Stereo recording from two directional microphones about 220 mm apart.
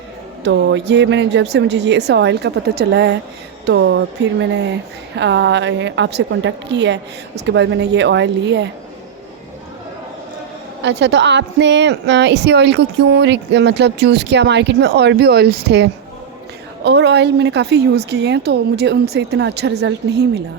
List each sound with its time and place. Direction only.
0.4 s a woman's voice: 55° right (ahead or behind)
10.8 s a woman's voice: 50° right (ahead or behind)